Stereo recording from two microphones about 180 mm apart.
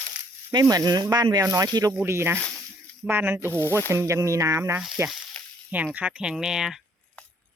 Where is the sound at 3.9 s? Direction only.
15° right (ahead or behind).